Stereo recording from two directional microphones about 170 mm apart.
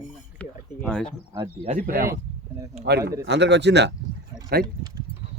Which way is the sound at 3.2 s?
85° right.